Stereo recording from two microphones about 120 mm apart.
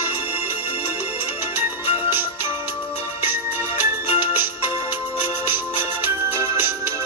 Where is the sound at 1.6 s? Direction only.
20° right (ahead or behind).